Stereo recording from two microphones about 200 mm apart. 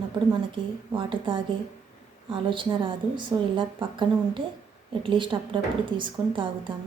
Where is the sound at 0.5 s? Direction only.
25° right (ahead or behind).